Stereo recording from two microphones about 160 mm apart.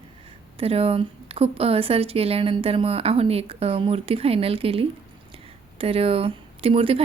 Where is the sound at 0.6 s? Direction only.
40° right (ahead or behind).